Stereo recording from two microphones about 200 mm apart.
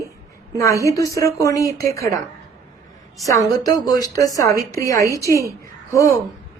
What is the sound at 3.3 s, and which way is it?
A woman's voice, 20° left (ahead or behind).